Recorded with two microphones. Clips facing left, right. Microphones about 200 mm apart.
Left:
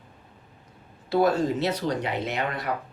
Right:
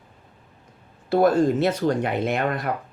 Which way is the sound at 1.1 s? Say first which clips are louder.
Right 4 dB; 50° right (ahead or behind).